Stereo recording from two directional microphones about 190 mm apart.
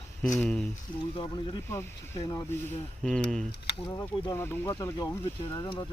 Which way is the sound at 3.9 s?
15° left (ahead or behind).